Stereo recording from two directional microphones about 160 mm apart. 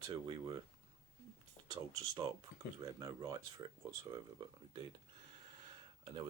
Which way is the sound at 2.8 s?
25° right (ahead or behind).